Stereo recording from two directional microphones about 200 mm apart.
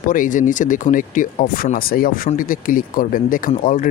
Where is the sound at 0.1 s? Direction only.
40° left (ahead or behind).